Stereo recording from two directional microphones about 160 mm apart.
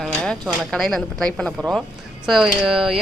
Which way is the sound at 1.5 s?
5° right (ahead or behind).